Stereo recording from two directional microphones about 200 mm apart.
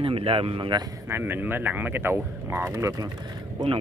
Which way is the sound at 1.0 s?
10° right (ahead or behind).